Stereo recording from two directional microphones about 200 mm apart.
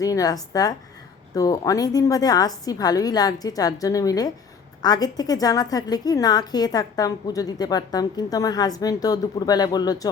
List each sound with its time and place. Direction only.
0.0 s a woman's voice: 15° left (ahead or behind)